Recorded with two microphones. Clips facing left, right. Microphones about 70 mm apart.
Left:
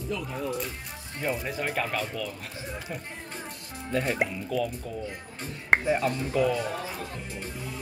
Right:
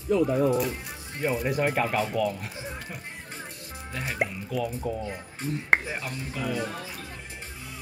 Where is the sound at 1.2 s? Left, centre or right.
Centre.